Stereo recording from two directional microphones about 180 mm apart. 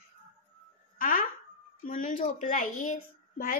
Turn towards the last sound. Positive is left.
turn(degrees=50)  # may be behind; listen again after turning